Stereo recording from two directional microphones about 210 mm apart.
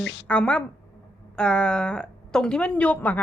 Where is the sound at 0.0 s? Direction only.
55° left (ahead or behind).